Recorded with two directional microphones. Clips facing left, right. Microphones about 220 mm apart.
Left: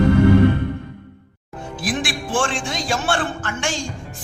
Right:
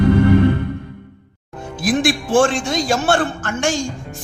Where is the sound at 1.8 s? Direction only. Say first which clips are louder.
Right 7 dB; 40° right (ahead or behind).